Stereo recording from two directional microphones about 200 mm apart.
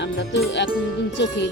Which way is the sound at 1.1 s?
60° left (ahead or behind).